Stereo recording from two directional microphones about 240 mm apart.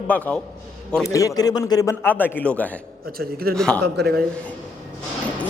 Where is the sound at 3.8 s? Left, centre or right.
Right.